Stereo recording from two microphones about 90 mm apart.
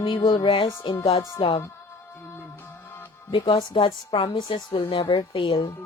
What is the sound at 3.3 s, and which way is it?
Speech, 70° left (ahead or behind).